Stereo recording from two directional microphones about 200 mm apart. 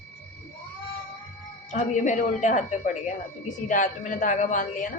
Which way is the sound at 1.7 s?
35° left (ahead or behind).